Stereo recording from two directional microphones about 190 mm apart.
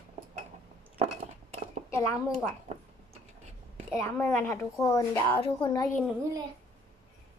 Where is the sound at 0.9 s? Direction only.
35° right (ahead or behind).